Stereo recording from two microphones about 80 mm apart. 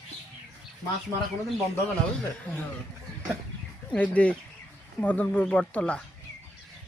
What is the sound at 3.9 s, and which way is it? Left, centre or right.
A man's voice, centre.